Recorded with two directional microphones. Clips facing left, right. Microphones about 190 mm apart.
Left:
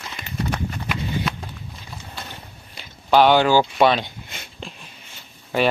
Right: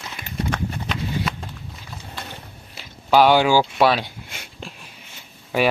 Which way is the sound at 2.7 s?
10° right (ahead or behind).